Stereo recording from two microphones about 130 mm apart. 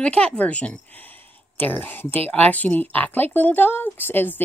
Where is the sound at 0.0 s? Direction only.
10° left (ahead or behind).